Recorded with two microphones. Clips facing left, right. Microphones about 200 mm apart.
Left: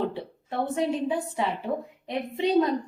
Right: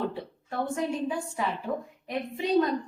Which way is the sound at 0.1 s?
25° left (ahead or behind).